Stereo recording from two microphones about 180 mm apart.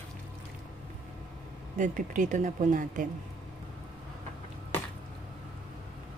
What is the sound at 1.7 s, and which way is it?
Speech, 45° right (ahead or behind).